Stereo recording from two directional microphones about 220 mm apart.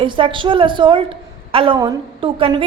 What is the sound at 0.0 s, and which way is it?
A woman's voice, 20° right (ahead or behind).